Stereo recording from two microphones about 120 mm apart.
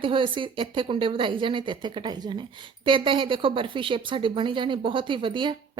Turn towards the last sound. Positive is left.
turn(degrees=-40)  # may be behind; listen again after turning